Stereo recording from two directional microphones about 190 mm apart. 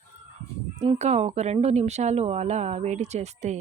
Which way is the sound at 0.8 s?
35° right (ahead or behind).